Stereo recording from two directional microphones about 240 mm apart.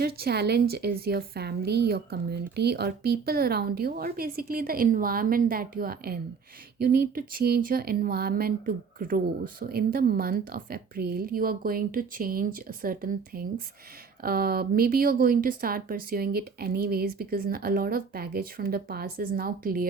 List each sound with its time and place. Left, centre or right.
0.0 s speech: right